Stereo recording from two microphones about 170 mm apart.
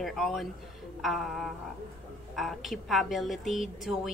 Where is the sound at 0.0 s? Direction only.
Centre (ahead or behind).